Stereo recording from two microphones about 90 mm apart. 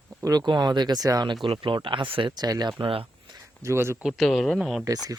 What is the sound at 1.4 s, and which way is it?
Speech, 70° right (ahead or behind).